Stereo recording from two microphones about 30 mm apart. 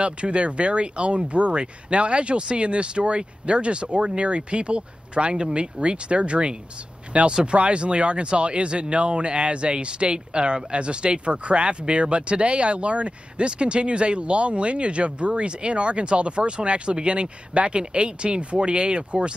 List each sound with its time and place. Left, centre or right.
0.0 s speech: right